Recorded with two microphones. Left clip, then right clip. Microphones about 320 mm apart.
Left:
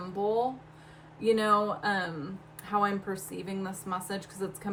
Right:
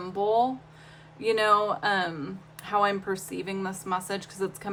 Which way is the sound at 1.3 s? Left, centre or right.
Centre.